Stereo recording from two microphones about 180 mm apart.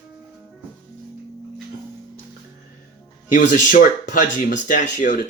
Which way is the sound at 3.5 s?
45° left (ahead or behind).